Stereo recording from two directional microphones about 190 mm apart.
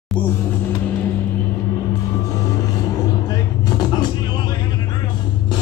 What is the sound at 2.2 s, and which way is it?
Vehicle, 15° left (ahead or behind).